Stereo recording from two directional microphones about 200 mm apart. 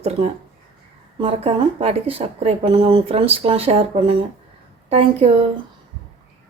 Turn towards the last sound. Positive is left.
turn(degrees=-30)  # may be behind; listen again after turning